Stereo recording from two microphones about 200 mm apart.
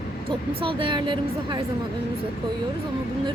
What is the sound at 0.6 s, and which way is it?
A woman's voice, 25° right (ahead or behind).